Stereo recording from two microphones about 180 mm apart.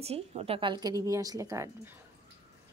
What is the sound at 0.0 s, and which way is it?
A woman's voice, 35° right (ahead or behind).